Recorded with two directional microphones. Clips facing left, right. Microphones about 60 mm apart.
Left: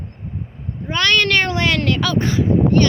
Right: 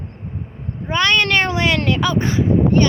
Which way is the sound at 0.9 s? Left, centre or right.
Centre.